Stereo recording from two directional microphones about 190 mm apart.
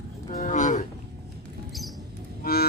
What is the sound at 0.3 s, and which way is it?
Cattle, 40° left (ahead or behind).